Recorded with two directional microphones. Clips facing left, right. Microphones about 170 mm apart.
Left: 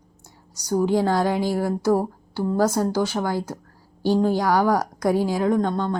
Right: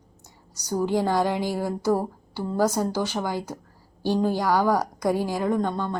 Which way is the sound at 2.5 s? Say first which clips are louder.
Left 2 dB; 10° right (ahead or behind).